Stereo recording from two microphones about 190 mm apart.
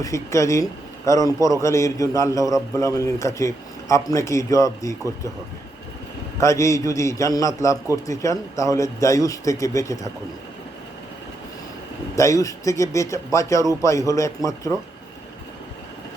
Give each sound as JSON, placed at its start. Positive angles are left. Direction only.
{"t": 0.0, "sound": "a man's voice", "side_deg": 15}
{"t": 6.4, "sound": "a man's voice", "side_deg": 15}
{"t": 12.1, "sound": "a man's voice", "side_deg": 15}